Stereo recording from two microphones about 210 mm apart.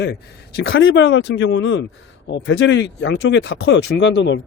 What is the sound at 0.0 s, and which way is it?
Speech, 55° left (ahead or behind).